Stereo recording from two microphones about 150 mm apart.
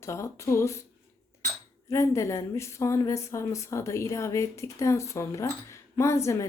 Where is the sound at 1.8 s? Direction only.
20° left (ahead or behind).